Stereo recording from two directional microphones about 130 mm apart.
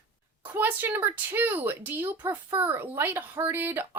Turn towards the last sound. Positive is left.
turn(degrees=-20)  # may be behind; listen again after turning